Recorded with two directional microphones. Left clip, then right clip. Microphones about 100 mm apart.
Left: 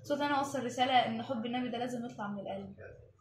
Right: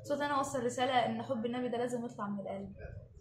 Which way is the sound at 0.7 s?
20° right (ahead or behind).